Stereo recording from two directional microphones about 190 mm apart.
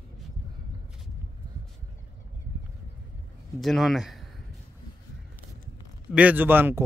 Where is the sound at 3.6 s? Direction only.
Centre (ahead or behind).